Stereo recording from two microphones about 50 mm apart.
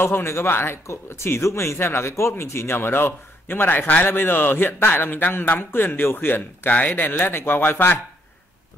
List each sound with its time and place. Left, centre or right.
0.0 s speech: left
6.7 s speech: left